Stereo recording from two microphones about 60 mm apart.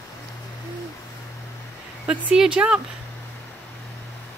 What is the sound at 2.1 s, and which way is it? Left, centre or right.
Speech, centre.